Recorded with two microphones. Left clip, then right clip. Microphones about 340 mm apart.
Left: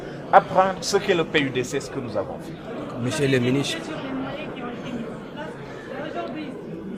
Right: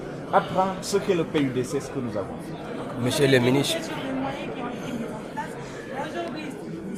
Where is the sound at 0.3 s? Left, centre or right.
Left.